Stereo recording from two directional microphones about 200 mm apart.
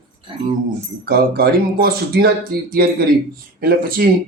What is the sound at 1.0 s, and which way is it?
Speech, 50° right (ahead or behind).